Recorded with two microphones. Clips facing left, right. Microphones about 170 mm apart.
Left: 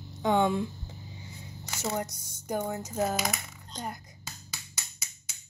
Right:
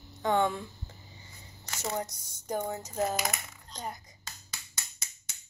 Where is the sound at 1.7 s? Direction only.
5° left (ahead or behind).